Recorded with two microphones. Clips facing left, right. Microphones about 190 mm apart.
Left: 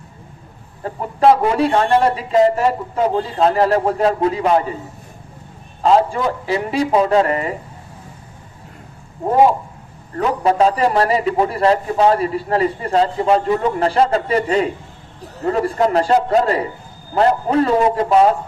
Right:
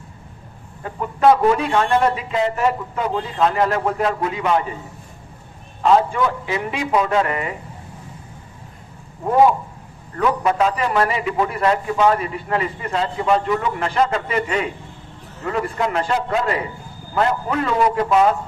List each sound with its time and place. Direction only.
0.8 s a man's voice: 35° left (ahead or behind)
5.8 s a man's voice: 35° left (ahead or behind)
10.1 s a man's voice: 35° left (ahead or behind)